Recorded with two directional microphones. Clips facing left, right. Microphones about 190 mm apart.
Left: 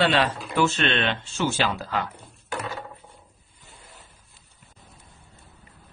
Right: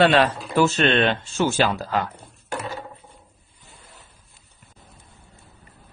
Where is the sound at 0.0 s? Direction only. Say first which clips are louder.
Right 5 dB; 45° right (ahead or behind).